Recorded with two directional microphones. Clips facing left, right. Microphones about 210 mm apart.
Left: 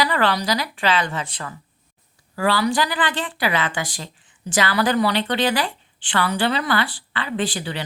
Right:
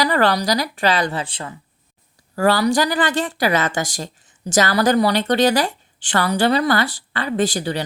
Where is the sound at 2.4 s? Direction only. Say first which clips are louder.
Right 4 dB; 45° right (ahead or behind).